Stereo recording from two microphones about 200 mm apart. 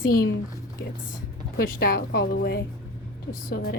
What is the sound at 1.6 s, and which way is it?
Speech, 50° left (ahead or behind).